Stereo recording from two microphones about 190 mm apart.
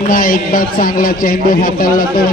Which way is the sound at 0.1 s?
45° left (ahead or behind).